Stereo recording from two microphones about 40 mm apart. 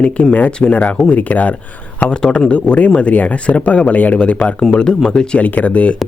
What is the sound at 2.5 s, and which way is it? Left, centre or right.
Speech, left.